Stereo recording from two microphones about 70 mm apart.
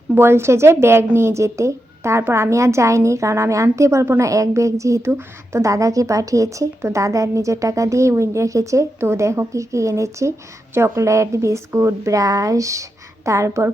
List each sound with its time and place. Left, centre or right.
0.1 s a woman's voice: right